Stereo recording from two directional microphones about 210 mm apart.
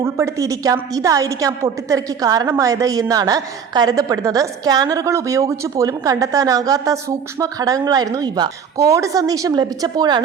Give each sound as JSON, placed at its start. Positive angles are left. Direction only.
{"t": 0.0, "sound": "a woman's voice", "side_deg": -15}